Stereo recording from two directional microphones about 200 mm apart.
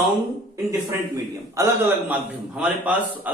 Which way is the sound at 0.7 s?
15° right (ahead or behind).